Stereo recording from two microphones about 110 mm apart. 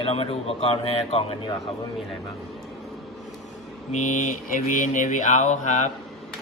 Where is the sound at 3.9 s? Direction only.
90° left.